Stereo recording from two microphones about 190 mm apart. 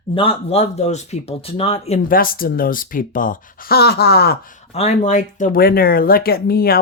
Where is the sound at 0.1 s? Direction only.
30° left (ahead or behind); by 4.4 s 55° left (ahead or behind).